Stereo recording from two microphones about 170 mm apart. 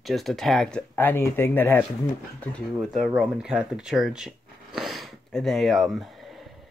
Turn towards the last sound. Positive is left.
turn(degrees=0)  # may be behind; listen again after turning